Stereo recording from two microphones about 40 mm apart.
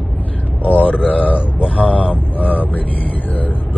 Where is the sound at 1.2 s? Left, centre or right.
Left.